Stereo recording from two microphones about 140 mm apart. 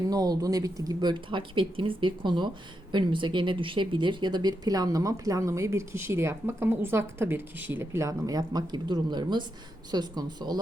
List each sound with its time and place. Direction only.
0.1 s speech: 25° right (ahead or behind)